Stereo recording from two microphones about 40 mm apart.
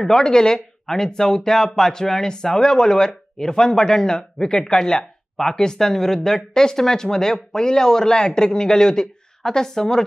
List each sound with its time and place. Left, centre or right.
0.0 s speech: centre